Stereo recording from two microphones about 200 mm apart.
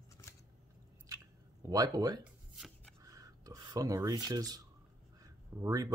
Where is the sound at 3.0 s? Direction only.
15° right (ahead or behind).